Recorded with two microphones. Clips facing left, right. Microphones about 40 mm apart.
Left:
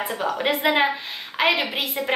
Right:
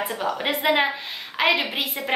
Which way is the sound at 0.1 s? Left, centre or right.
Centre.